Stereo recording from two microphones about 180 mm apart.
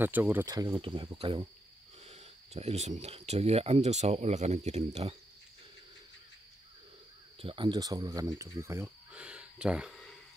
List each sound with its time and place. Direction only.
0.0 s speech: 10° right (ahead or behind); by 5.1 s 35° right (ahead or behind)
7.3 s speech: 30° right (ahead or behind); by 10.1 s centre (ahead or behind)